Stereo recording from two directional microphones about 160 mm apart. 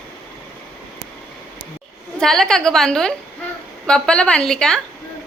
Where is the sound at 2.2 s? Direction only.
5° left (ahead or behind).